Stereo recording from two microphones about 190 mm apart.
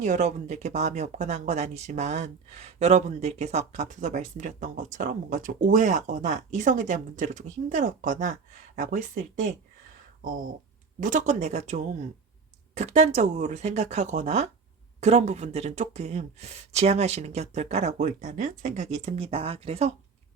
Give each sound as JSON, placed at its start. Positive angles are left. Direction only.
{"t": 0.0, "sound": "speech", "side_deg": -40}
{"t": 11.0, "sound": "speech", "side_deg": -40}